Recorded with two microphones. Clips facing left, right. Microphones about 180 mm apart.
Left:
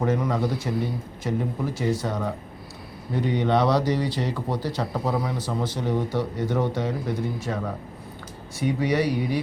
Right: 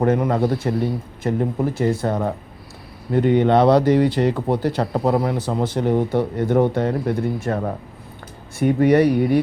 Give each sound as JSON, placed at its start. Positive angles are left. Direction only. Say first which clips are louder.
{"t": 0.0, "sound": "speech", "louder": "right 6 dB", "side_deg": -55}